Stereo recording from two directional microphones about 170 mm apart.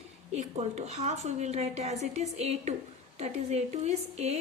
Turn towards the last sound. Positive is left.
turn(degrees=-40)  # may be behind; listen again after turning